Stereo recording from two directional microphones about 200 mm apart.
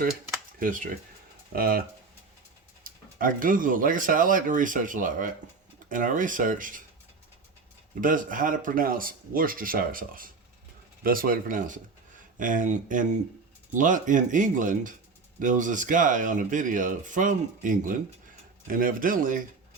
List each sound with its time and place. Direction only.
0.6 s speech: 40° right (ahead or behind)
2.8 s speech: 45° right (ahead or behind)
8.0 s speech: 40° right (ahead or behind)